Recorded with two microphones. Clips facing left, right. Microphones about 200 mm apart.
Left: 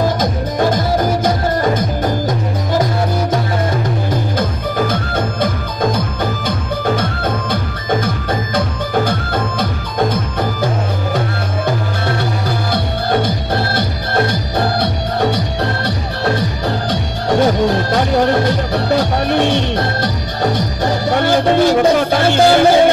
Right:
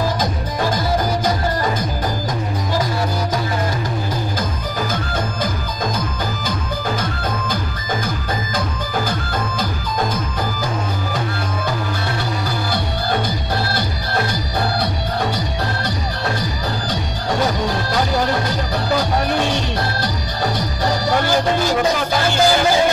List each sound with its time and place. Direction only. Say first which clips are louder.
0.2 s music: left 5 dB; 55° left (ahead or behind)
4.4 s music: left 6 dB; 65° left (ahead or behind)
13.7 s music: left 5 dB; 60° left (ahead or behind)